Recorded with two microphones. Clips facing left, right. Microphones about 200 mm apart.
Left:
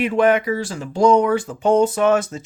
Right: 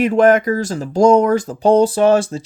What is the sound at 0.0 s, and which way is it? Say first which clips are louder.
Speech: right 4 dB; 45° right (ahead or behind).